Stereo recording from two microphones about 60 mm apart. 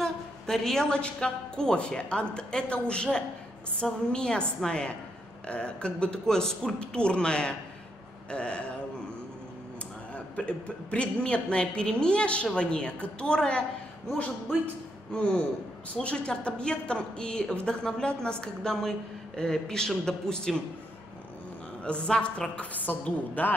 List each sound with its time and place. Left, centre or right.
0.0 s a man's voice: centre
10.1 s a man's voice: left
15.1 s a man's voice: centre
21.8 s a woman's voice: centre